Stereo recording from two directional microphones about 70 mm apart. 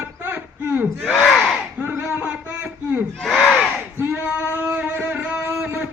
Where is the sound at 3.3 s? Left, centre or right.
Centre.